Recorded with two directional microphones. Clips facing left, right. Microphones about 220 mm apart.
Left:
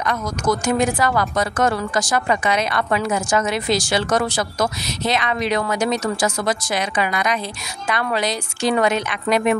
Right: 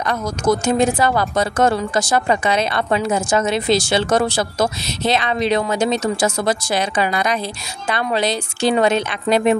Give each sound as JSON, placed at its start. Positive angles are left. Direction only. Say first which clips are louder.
{"t": 0.0, "sound": "speech", "louder": "right 3 dB", "side_deg": -30}